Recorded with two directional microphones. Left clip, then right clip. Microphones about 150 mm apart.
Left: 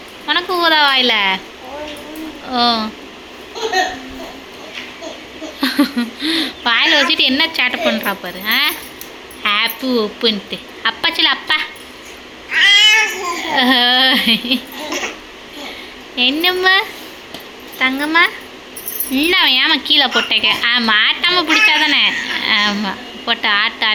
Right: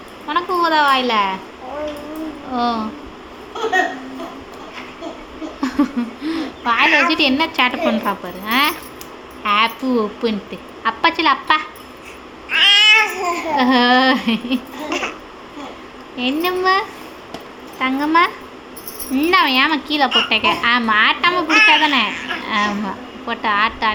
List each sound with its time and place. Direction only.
0.3 s a woman's voice: 5° left (ahead or behind)
2.5 s a woman's voice: centre (ahead or behind)
5.5 s a woman's voice: centre (ahead or behind)
6.8 s a woman's voice: 30° right (ahead or behind)
7.1 s a woman's voice: centre (ahead or behind)
12.6 s cat: 55° right (ahead or behind)
13.5 s a woman's voice: centre (ahead or behind)
14.8 s a sound: 50° right (ahead or behind)
16.1 s a woman's voice: centre (ahead or behind)